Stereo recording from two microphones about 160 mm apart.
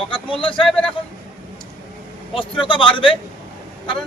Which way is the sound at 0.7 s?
5° left (ahead or behind).